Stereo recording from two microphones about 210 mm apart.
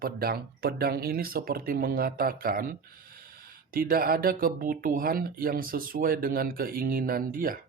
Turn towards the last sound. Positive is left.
turn(degrees=-40)  # may be behind; listen again after turning